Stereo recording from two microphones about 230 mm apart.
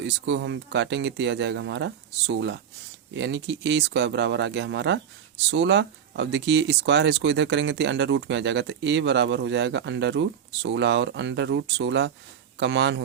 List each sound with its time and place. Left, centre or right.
0.0 s speech: right